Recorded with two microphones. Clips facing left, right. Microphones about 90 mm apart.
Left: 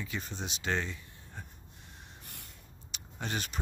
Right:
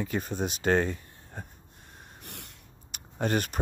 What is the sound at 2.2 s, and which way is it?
Snort, 70° right (ahead or behind).